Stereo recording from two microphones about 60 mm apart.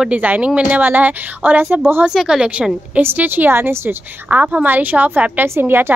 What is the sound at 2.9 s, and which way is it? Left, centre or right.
A woman's voice, right.